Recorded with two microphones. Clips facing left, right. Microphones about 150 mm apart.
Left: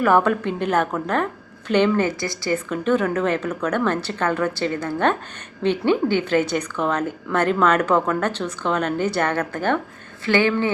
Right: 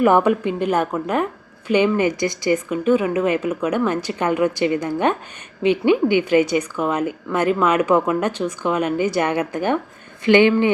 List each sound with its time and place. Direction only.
0.0 s a woman's voice: 15° right (ahead or behind)